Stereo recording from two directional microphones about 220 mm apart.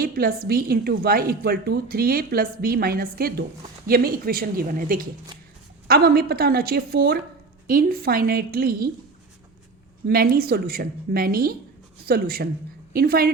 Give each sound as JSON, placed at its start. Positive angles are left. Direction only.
{"t": 0.0, "sound": "a woman's voice", "side_deg": -45}
{"t": 10.1, "sound": "a woman's voice", "side_deg": -45}